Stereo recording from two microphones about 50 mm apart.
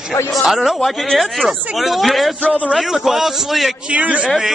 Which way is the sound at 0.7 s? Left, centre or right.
Centre.